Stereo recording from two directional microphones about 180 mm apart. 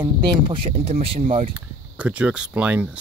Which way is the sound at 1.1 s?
45° right (ahead or behind).